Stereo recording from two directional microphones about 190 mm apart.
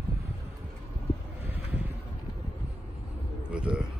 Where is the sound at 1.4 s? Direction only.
10° right (ahead or behind).